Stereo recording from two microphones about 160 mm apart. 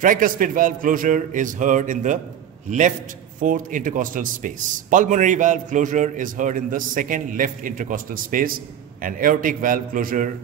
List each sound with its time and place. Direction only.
0.0 s a man's voice: 60° right (ahead or behind)
3.3 s a man's voice: 55° right (ahead or behind)